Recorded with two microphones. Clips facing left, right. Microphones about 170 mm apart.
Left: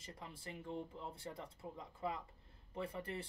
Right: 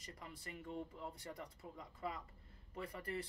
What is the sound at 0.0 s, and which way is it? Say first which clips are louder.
Speech: left 2 dB; 25° left (ahead or behind).